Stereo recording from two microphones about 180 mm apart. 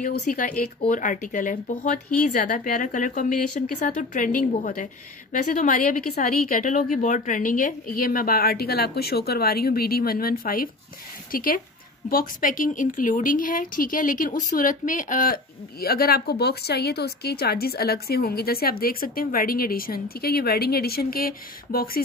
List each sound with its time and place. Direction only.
0.2 s a woman's voice: 45° left (ahead or behind)